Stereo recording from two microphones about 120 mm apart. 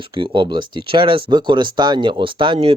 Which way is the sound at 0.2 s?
45° right (ahead or behind).